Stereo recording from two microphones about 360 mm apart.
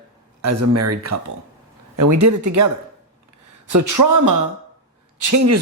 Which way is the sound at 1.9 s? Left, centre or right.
Right.